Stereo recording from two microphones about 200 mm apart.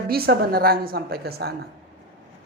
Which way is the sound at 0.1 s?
50° right (ahead or behind).